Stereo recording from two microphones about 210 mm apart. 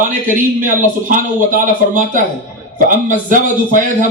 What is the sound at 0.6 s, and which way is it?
Speech, 40° right (ahead or behind).